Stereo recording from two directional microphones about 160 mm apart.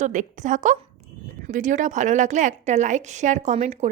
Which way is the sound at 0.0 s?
50° right (ahead or behind).